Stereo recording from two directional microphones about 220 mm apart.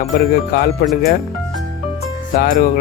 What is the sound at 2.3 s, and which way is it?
Speech, 40° left (ahead or behind).